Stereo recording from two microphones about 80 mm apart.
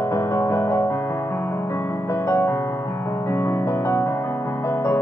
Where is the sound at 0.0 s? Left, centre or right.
Left.